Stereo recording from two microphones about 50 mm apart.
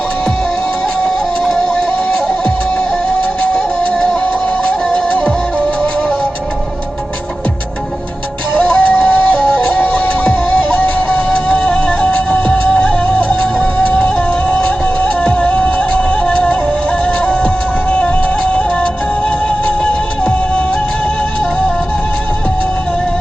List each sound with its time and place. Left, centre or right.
3.4 s music: left
8.5 s music: left
19.6 s music: left